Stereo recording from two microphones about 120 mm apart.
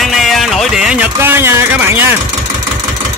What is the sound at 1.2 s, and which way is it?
Speech, 20° right (ahead or behind).